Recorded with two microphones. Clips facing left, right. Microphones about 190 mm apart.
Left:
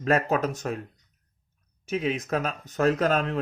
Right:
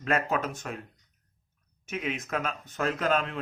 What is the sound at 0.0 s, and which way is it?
Speech, 40° left (ahead or behind).